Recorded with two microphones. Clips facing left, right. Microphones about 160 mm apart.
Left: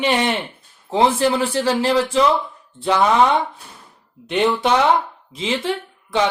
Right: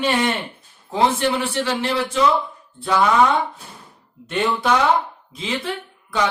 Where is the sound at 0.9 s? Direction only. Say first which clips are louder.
Left 2 dB; 30° left (ahead or behind).